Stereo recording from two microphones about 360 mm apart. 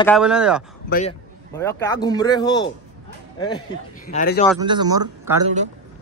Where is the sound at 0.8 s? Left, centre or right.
Left.